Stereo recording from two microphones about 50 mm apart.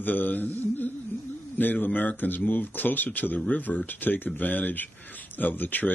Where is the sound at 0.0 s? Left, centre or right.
Left.